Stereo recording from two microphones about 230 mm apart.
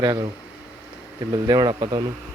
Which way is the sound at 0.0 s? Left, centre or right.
Centre.